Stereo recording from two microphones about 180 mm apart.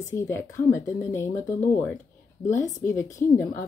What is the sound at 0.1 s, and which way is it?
A woman's voice, 15° left (ahead or behind).